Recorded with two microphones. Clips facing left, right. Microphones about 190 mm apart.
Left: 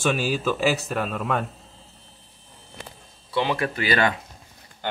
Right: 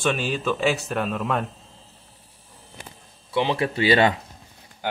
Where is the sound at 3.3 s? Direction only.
25° right (ahead or behind).